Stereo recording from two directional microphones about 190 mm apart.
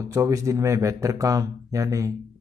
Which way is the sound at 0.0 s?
15° right (ahead or behind).